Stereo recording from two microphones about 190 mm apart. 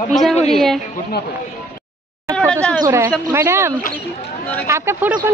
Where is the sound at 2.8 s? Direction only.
15° right (ahead or behind).